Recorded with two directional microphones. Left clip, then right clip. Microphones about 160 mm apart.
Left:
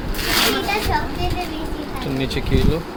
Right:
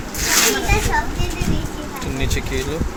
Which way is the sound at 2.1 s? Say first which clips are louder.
Left 2 dB; 15° left (ahead or behind).